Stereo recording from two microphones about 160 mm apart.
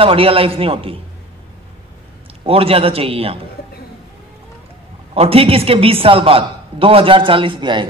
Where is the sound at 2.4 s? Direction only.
35° right (ahead or behind).